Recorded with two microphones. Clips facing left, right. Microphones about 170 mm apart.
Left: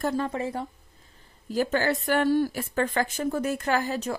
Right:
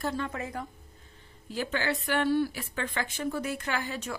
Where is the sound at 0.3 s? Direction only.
30° left (ahead or behind).